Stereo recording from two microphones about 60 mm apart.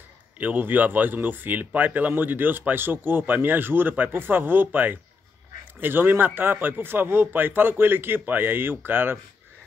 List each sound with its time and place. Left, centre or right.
0.4 s speech: right